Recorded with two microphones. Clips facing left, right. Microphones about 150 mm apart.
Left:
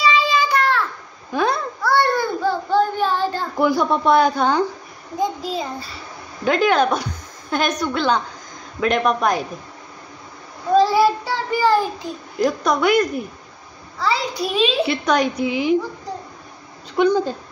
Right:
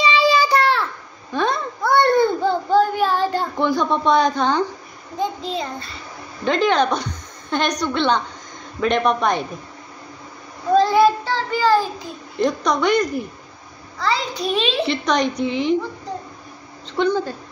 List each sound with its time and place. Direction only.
0.3 s child singing: 35° right (ahead or behind)
1.3 s a sound: 5° left (ahead or behind)
1.8 s a sound: 20° right (ahead or behind)
2.8 s child singing: 10° right (ahead or behind)
3.5 s a child's voice: 10° left (ahead or behind)
10.7 s child singing: 5° left (ahead or behind)
12.4 s a woman's voice: 5° left (ahead or behind)
16.9 s a child's voice: 15° left (ahead or behind)